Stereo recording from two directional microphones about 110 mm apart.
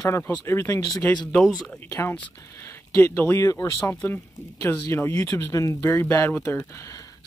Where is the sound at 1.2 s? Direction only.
5° left (ahead or behind).